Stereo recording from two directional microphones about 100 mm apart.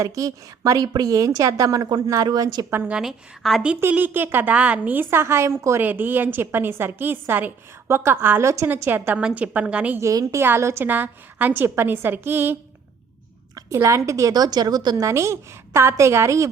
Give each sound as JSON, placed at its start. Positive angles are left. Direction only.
{"t": 0.0, "sound": "a woman's voice", "side_deg": -35}
{"t": 2.6, "sound": "a woman's voice", "side_deg": -20}
{"t": 2.9, "sound": "a woman's voice", "side_deg": -5}
{"t": 3.8, "sound": "a woman's voice", "side_deg": -20}
{"t": 10.0, "sound": "a woman's voice", "side_deg": -30}
{"t": 13.6, "sound": "a woman's voice", "side_deg": -30}
{"t": 15.0, "sound": "a woman's voice", "side_deg": -30}